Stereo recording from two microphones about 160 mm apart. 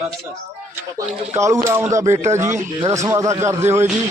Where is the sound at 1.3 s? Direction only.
20° right (ahead or behind).